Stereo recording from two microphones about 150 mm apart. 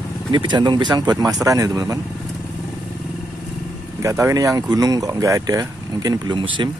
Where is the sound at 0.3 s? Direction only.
30° right (ahead or behind).